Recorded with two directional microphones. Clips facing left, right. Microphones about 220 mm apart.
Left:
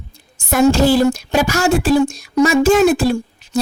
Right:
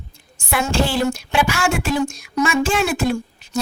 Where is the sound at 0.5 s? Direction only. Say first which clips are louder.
Left 8 dB; 40° left (ahead or behind).